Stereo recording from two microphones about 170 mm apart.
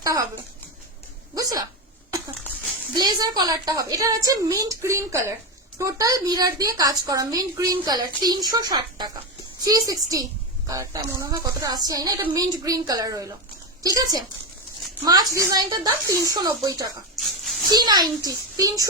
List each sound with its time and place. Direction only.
0.0 s speech: 20° right (ahead or behind)
1.4 s a woman's voice: 20° right (ahead or behind)
2.0 s a sound: 20° right (ahead or behind)
2.9 s a woman's voice: 25° right (ahead or behind)
17.2 s a sound: centre (ahead or behind)
17.7 s a woman's voice: 25° right (ahead or behind)